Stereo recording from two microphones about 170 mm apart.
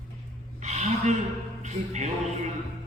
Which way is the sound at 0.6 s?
45° right (ahead or behind).